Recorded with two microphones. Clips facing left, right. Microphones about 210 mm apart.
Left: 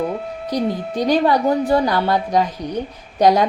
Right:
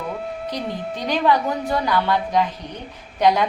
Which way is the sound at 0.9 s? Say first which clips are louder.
Left 3 dB; 40° left (ahead or behind).